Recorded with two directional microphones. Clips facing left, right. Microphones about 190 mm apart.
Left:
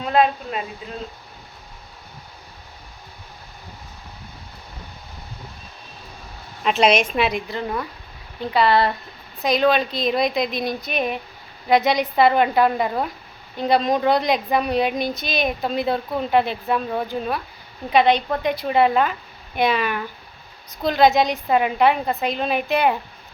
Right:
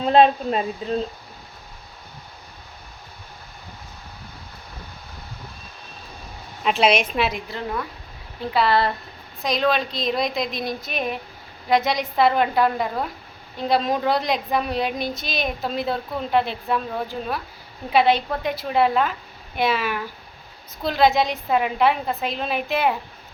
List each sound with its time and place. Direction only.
0.0 s a woman's voice: 25° right (ahead or behind)
6.6 s a woman's voice: centre (ahead or behind)